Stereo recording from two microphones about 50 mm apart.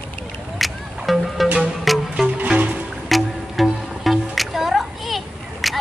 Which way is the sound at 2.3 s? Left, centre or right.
Right.